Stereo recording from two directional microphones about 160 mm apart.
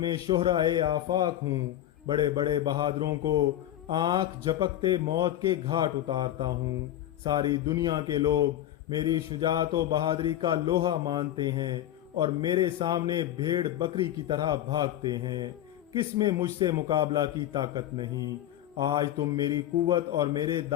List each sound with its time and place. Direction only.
0.0 s a man's voice: 25° right (ahead or behind)